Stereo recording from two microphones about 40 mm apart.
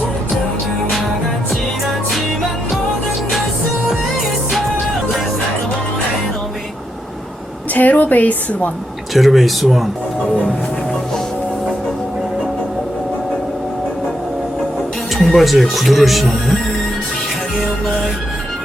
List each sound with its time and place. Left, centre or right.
1.5 s music: centre
7.7 s a woman's voice: left
9.1 s speech: centre
15.1 s music: centre
15.7 s speech: centre